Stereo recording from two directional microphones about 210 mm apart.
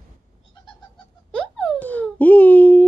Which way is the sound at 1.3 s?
5° left (ahead or behind).